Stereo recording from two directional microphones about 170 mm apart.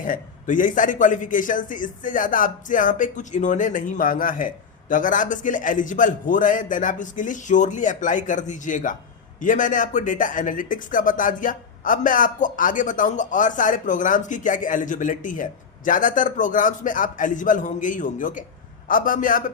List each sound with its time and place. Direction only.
0.0 s speech: 50° left (ahead or behind)